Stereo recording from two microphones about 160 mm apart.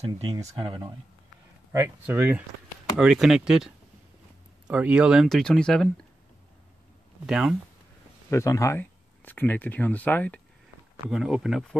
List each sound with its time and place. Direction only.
0.6 s speech: 30° right (ahead or behind)
1.7 s speech: 15° right (ahead or behind); by 5.9 s 5° left (ahead or behind)
7.2 s speech: 5° right (ahead or behind)
8.3 s speech: 20° left (ahead or behind)
11.1 s speech: centre (ahead or behind)